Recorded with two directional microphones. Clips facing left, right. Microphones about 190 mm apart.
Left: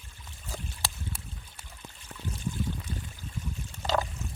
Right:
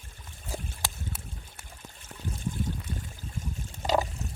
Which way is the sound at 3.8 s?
20° right (ahead or behind).